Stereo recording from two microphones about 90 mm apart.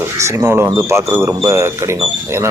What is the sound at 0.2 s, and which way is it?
Speech, 30° right (ahead or behind).